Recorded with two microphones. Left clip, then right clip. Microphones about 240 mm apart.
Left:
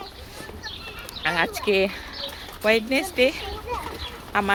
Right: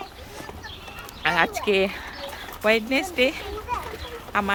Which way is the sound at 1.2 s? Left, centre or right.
Centre.